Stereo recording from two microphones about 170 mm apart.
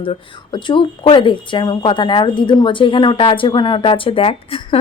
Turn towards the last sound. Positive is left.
turn(degrees=35)  # may be behind; listen again after turning